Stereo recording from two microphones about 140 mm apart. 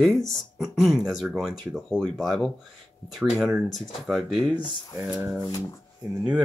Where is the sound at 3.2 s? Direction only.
10° right (ahead or behind).